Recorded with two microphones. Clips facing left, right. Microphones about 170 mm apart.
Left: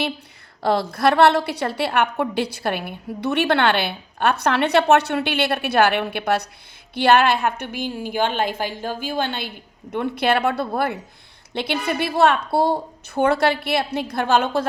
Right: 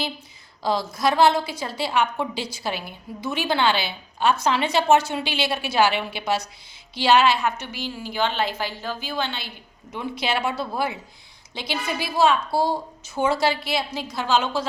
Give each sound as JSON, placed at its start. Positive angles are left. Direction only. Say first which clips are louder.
{"t": 0.6, "sound": "a woman's voice", "louder": "left 4 dB", "side_deg": 60}